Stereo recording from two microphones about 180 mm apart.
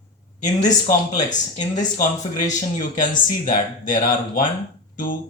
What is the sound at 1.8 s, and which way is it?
Speech, 45° left (ahead or behind).